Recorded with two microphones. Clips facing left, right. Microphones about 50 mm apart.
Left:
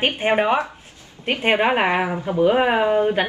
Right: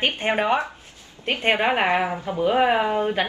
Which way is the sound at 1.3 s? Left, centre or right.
Centre.